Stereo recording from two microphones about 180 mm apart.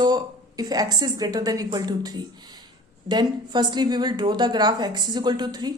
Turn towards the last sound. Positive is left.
turn(degrees=-25)  # may be behind; listen again after turning